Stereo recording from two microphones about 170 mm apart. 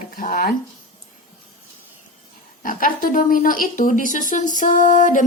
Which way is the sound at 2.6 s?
55° left (ahead or behind).